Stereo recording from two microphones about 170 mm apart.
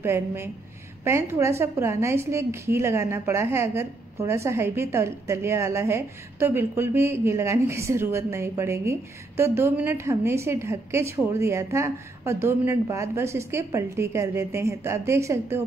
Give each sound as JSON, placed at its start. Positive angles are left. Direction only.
{"t": 0.0, "sound": "a woman's voice", "side_deg": -15}